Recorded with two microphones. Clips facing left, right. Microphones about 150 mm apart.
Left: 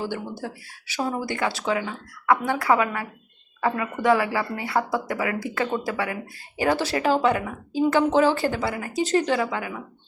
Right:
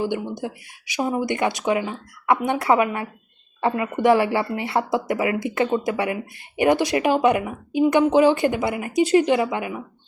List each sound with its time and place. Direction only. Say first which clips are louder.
0.0 s speech: right 5 dB; 15° right (ahead or behind)